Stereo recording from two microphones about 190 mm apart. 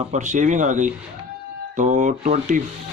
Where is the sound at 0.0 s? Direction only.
40° right (ahead or behind).